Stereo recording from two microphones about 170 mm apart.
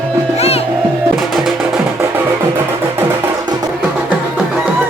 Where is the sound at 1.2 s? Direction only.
Centre (ahead or behind).